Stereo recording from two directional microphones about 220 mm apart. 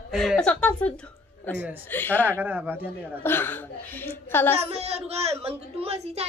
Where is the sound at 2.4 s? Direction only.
10° right (ahead or behind).